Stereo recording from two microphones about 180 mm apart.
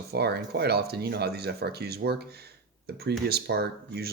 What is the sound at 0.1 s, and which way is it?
Speech, 65° right (ahead or behind).